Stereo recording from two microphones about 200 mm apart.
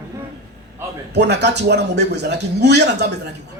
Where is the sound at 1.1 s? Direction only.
55° right (ahead or behind).